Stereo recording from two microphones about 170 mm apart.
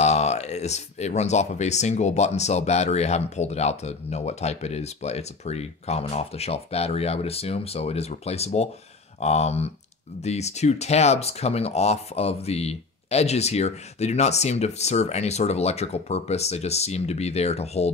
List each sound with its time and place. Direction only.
0.0 s speech: 40° left (ahead or behind)